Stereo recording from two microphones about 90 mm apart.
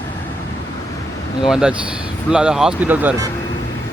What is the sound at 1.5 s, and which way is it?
Speech, 5° right (ahead or behind).